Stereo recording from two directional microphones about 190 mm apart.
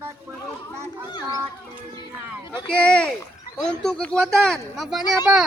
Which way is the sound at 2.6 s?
5° left (ahead or behind).